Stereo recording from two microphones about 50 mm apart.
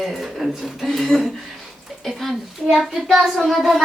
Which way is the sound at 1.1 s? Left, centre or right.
Centre.